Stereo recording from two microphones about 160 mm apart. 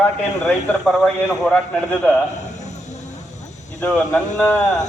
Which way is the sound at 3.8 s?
10° left (ahead or behind).